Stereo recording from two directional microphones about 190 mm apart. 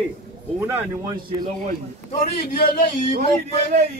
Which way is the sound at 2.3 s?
50° left (ahead or behind).